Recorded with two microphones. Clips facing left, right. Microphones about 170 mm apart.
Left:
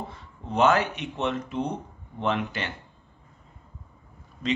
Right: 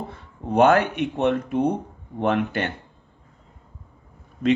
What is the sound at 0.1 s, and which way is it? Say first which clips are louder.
Speech: right 7 dB; 55° right (ahead or behind).